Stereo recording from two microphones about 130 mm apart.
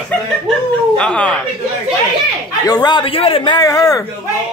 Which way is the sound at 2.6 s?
30° left (ahead or behind).